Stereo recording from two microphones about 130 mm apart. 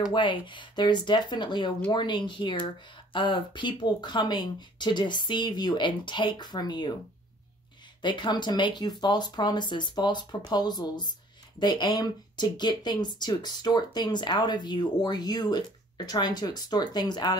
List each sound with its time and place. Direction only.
0.1 s speech: 40° left (ahead or behind)
8.0 s speech: 35° left (ahead or behind)